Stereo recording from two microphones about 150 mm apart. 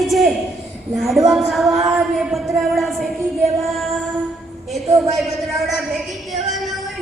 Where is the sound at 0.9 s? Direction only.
Centre (ahead or behind).